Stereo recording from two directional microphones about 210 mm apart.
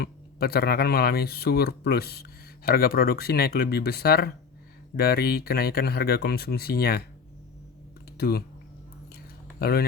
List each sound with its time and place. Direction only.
0.0 s speech: 50° left (ahead or behind)
8.2 s speech: 50° left (ahead or behind)
9.6 s speech: 45° left (ahead or behind)